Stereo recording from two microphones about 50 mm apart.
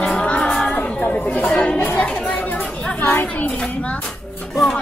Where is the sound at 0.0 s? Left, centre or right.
Centre.